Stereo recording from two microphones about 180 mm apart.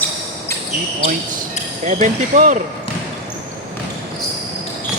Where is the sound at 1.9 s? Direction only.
40° right (ahead or behind).